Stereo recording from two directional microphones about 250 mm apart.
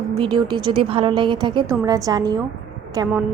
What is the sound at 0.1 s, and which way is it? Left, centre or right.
A woman's voice, centre.